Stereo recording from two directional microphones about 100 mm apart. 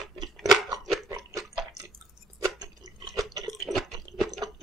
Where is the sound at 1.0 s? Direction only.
30° right (ahead or behind).